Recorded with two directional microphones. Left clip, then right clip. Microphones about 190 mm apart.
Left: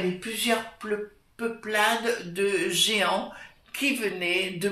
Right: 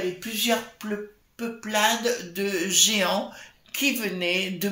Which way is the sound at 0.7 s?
50° right (ahead or behind).